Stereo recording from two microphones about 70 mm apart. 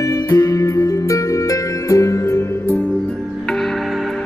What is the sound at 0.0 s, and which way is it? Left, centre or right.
Music, left.